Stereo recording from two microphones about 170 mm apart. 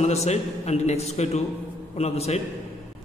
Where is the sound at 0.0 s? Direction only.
40° left (ahead or behind).